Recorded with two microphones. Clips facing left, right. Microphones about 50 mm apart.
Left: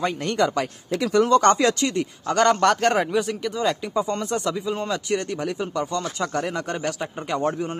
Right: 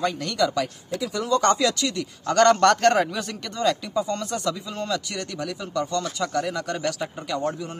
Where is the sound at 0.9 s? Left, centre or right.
Left.